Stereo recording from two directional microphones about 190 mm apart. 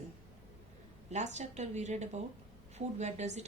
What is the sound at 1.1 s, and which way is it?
A woman's voice, 35° right (ahead or behind).